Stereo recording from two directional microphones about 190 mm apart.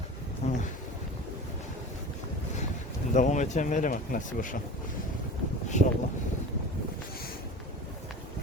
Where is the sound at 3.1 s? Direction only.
40° left (ahead or behind).